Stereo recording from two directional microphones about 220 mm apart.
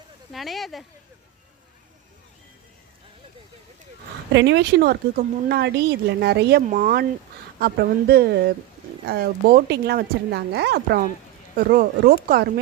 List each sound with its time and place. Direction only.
0.3 s speech: centre (ahead or behind)
4.3 s speech: 55° right (ahead or behind)